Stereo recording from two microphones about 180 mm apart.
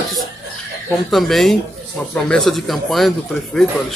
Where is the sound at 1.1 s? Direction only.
Centre (ahead or behind).